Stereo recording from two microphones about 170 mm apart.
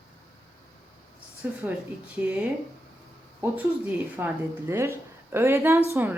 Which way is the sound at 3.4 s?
15° right (ahead or behind).